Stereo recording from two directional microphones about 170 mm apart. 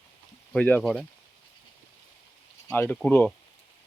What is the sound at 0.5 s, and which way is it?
Speech, 5° left (ahead or behind).